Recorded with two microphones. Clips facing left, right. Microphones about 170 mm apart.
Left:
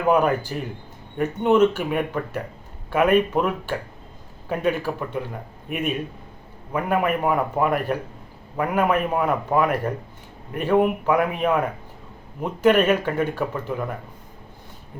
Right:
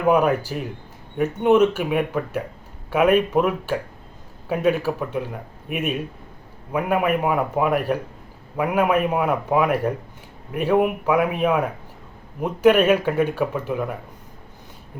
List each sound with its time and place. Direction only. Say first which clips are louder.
0.0 s speech: right 1 dB; 5° right (ahead or behind)